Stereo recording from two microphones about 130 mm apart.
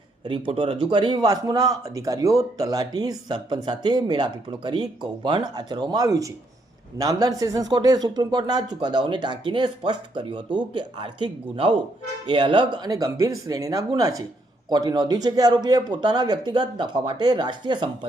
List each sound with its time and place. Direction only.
0.3 s a man's voice: 40° right (ahead or behind)